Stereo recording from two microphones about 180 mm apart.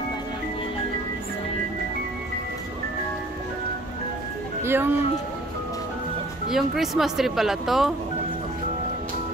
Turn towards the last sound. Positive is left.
turn(degrees=0)  # may be behind; listen again after turning